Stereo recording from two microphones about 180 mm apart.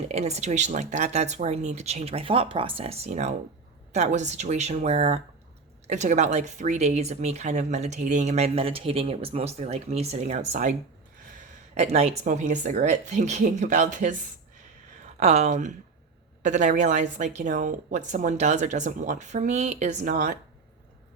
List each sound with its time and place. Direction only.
0.1 s a woman's voice: 35° right (ahead or behind)
15.2 s a woman's voice: 35° right (ahead or behind)